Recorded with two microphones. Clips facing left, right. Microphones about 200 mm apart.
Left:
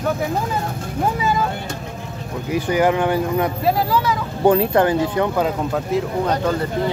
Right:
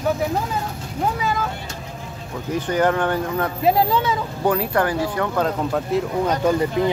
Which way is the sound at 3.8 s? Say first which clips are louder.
Left 1 dB; 25° right (ahead or behind).